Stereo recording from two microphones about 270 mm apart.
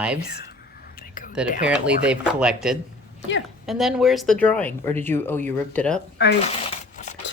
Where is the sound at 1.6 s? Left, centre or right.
Centre.